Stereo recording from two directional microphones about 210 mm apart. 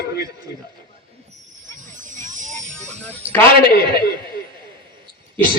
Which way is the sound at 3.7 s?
45° left (ahead or behind).